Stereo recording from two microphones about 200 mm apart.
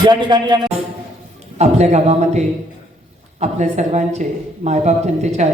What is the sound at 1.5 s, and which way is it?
A woman's voice, 35° right (ahead or behind).